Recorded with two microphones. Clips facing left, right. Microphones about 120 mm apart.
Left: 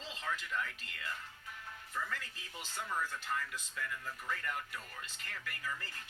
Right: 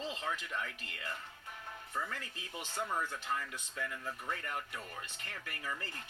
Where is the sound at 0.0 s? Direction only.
55° right (ahead or behind).